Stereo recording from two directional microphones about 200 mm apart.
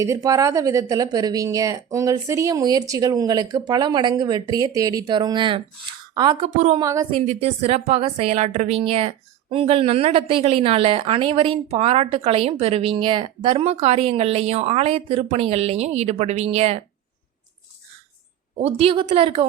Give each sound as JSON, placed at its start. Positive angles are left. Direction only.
{"t": 0.0, "sound": "a woman's voice", "side_deg": -15}
{"t": 7.2, "sound": "a woman's voice", "side_deg": -30}
{"t": 18.6, "sound": "a woman's voice", "side_deg": -30}